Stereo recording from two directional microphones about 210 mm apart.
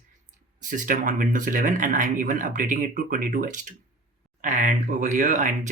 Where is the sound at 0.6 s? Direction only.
40° right (ahead or behind).